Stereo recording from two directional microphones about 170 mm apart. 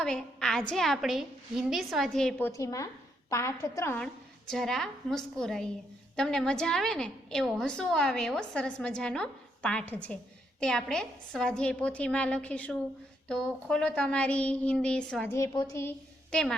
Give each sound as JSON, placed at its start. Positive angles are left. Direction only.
{"t": 0.0, "sound": "a woman's voice", "side_deg": 5}
{"t": 2.5, "sound": "a woman's voice", "side_deg": 20}
{"t": 4.0, "sound": "a woman's voice", "side_deg": 5}
{"t": 15.4, "sound": "a woman's voice", "side_deg": 15}